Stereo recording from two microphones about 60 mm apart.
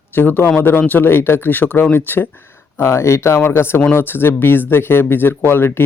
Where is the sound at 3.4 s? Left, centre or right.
Left.